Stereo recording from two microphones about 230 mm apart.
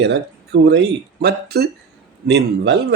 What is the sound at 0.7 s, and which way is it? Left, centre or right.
A man's voice, right.